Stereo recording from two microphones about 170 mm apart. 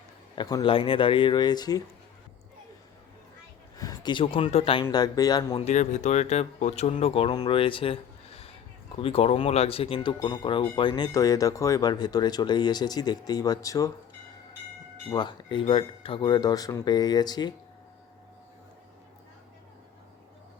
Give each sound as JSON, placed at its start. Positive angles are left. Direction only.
{"t": 0.3, "sound": "speech", "side_deg": 25}
{"t": 3.8, "sound": "speech", "side_deg": 25}
{"t": 5.6, "sound": "speech", "side_deg": 45}
{"t": 15.1, "sound": "speech", "side_deg": 25}